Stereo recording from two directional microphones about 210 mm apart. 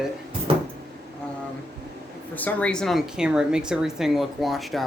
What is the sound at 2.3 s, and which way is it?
Speech, 5° left (ahead or behind).